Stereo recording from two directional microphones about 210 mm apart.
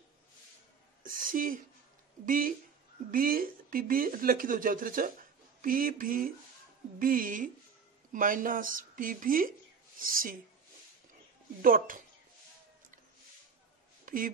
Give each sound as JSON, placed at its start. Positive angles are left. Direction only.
{"t": 1.0, "sound": "a sound", "side_deg": -40}
{"t": 2.2, "sound": "a woman's voice", "side_deg": -40}
{"t": 11.6, "sound": "a woman's voice", "side_deg": -40}
{"t": 14.0, "sound": "speech", "side_deg": -40}